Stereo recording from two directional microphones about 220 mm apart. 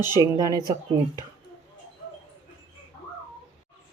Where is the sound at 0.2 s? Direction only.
15° right (ahead or behind).